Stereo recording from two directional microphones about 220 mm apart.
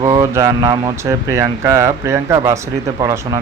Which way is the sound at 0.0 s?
15° right (ahead or behind).